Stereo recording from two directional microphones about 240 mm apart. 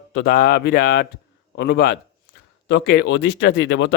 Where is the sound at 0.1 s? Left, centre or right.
Left.